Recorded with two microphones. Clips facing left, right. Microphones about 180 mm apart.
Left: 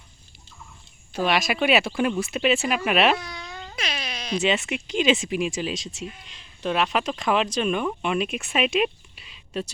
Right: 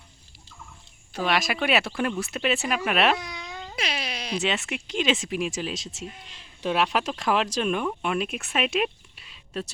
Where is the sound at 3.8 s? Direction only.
30° right (ahead or behind).